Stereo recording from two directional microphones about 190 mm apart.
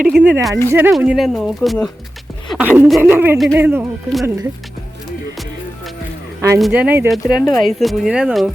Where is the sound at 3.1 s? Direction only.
10° right (ahead or behind).